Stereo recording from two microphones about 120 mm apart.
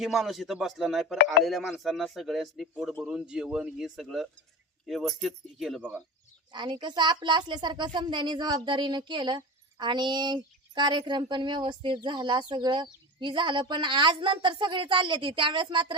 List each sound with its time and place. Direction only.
0.0 s speech: centre (ahead or behind)
6.5 s a woman's voice: 40° right (ahead or behind)